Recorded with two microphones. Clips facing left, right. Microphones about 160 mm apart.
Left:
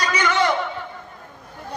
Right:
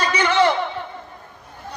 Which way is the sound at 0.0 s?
30° right (ahead or behind).